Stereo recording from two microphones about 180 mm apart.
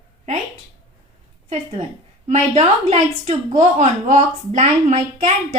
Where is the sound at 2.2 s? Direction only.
40° right (ahead or behind).